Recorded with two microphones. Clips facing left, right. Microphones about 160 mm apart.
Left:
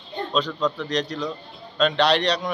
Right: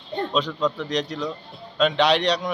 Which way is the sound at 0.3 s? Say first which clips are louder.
Left 1 dB; 5° right (ahead or behind).